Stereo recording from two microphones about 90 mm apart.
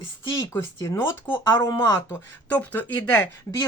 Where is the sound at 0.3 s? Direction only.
25° left (ahead or behind).